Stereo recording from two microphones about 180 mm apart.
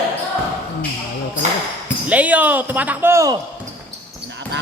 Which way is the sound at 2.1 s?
10° right (ahead or behind).